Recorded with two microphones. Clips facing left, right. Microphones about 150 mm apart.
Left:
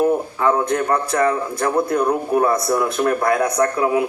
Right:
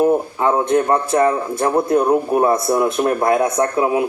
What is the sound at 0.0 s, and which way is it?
A man's voice, 25° right (ahead or behind).